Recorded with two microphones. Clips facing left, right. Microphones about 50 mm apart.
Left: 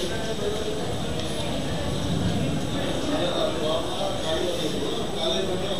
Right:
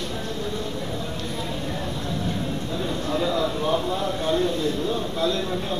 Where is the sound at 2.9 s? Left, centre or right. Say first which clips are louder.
Right 2 dB; right.